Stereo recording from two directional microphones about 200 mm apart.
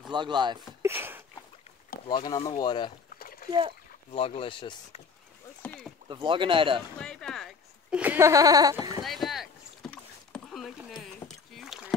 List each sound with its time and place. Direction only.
0.1 s speech: 25° right (ahead or behind)
0.8 s a sound: 10° right (ahead or behind)
2.0 s speech: 20° left (ahead or behind)
3.2 s splash: 45° left (ahead or behind)
3.4 s speech: 20° right (ahead or behind)
4.1 s speech: 30° left (ahead or behind)
5.6 s rowboat: 10° left (ahead or behind)
6.0 s speech: 25° right (ahead or behind)
7.0 s speech: 5° left (ahead or behind); by 9.0 s 20° right (ahead or behind)
9.0 s rowboat: centre (ahead or behind)
11.0 s a sound: centre (ahead or behind)